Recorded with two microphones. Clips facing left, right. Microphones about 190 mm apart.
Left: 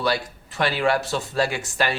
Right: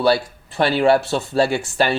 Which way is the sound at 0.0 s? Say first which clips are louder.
Right 7 dB; 30° right (ahead or behind).